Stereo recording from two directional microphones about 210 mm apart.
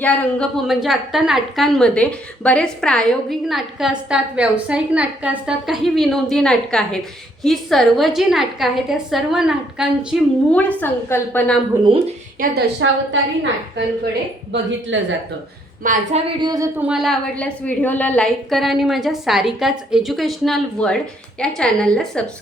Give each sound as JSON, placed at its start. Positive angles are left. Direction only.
{"t": 0.0, "sound": "a woman's voice", "side_deg": 5}
{"t": 10.5, "sound": "a woman's voice", "side_deg": 5}
{"t": 11.8, "sound": "speech", "side_deg": -25}
{"t": 12.4, "sound": "a woman's voice", "side_deg": -40}
{"t": 12.8, "sound": "a woman's voice", "side_deg": -65}
{"t": 14.9, "sound": "a woman's voice", "side_deg": -65}
{"t": 15.8, "sound": "a woman's voice", "side_deg": -40}
{"t": 16.4, "sound": "speech", "side_deg": -20}
{"t": 16.8, "sound": "a woman's voice", "side_deg": 0}